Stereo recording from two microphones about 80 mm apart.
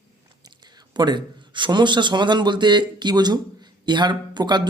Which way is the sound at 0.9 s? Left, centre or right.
Right.